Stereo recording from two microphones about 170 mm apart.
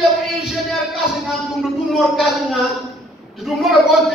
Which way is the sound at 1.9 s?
Centre (ahead or behind).